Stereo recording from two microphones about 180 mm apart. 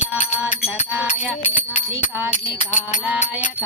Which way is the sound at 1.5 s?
35° left (ahead or behind).